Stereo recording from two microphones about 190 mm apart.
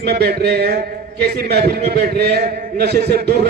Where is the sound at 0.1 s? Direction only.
55° right (ahead or behind).